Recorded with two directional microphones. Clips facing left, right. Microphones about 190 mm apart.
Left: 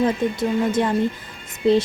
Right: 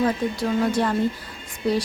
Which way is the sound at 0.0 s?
20° left (ahead or behind).